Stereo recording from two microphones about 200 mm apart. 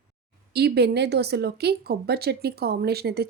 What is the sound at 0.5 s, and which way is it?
Speech, 55° right (ahead or behind).